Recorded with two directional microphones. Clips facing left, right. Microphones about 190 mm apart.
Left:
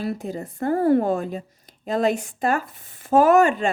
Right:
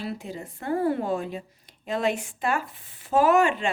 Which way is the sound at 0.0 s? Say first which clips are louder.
Left 6 dB; 45° left (ahead or behind).